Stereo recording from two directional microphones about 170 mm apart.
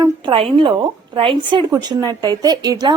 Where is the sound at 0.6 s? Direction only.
30° right (ahead or behind).